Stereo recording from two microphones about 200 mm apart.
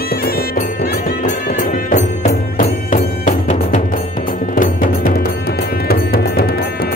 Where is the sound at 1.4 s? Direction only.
40° left (ahead or behind).